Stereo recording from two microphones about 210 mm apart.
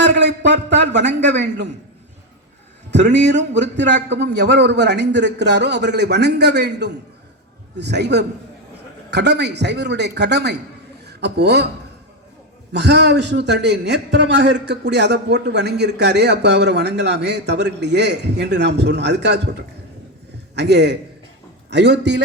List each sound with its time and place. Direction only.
0.2 s a man's voice: 55° right (ahead or behind)
3.2 s a man's voice: 55° right (ahead or behind)
12.7 s a man's voice: 55° right (ahead or behind)